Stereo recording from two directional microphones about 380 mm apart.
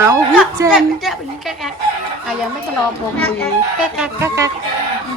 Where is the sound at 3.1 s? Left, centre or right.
Centre.